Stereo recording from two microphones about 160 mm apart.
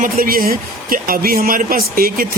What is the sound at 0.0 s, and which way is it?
Speech, 60° right (ahead or behind).